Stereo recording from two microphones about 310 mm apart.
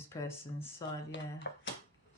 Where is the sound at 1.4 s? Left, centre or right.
Left.